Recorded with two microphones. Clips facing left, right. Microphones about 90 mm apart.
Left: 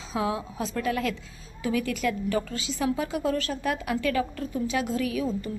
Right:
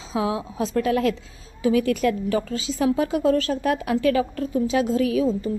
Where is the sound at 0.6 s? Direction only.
35° right (ahead or behind).